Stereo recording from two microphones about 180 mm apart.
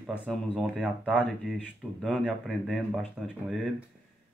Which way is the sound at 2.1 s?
Centre (ahead or behind).